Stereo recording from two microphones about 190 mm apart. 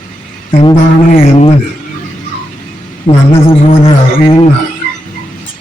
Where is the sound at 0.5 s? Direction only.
30° left (ahead or behind).